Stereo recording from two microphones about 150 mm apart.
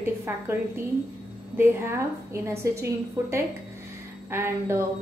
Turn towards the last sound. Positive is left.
turn(degrees=-15)  # may be behind; listen again after turning